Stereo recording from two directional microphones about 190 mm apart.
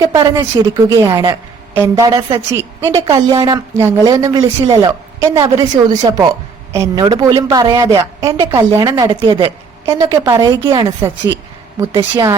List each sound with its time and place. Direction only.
0.0 s a woman's voice: 15° right (ahead or behind)
2.0 s a woman's voice: 25° right (ahead or behind)
9.8 s a woman's voice: 15° right (ahead or behind)